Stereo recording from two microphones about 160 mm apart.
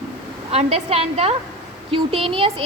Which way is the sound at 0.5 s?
40° right (ahead or behind).